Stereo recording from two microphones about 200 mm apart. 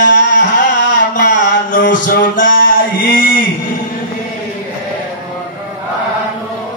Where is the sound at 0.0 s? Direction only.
60° left (ahead or behind).